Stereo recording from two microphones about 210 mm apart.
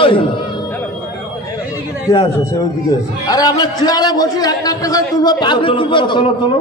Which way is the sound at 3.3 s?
20° left (ahead or behind).